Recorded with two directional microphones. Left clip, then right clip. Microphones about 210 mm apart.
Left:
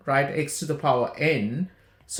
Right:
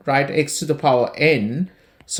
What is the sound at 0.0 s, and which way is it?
Speech, 35° right (ahead or behind).